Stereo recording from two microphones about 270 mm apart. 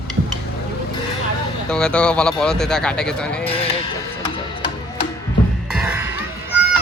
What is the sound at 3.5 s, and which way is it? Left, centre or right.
Music, left.